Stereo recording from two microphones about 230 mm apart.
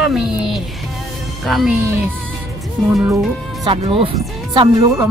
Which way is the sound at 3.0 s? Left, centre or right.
Centre.